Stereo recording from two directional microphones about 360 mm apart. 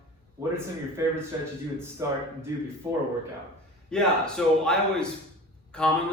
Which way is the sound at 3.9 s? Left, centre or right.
Centre.